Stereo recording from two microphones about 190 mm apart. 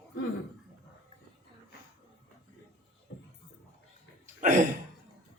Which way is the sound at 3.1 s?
90° left.